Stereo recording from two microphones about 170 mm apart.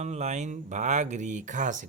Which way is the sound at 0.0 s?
40° right (ahead or behind).